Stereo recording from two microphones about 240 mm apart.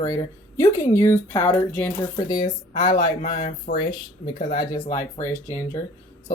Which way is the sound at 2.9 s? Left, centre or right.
Left.